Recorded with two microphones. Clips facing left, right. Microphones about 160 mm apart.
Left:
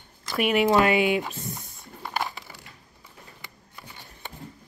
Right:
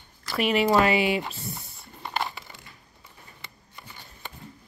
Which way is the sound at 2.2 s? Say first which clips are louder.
Even; centre (ahead or behind).